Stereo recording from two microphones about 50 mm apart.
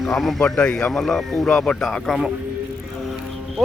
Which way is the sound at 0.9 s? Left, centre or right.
Centre.